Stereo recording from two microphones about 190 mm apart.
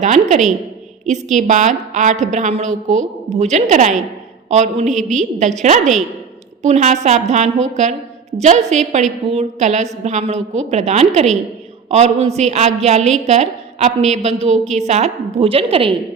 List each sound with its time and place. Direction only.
0.0 s a woman's voice: 40° right (ahead or behind)